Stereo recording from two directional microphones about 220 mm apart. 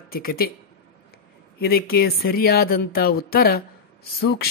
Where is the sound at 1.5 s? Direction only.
45° left (ahead or behind).